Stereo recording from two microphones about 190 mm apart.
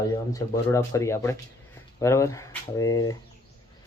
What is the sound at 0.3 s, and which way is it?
Speech, 15° left (ahead or behind).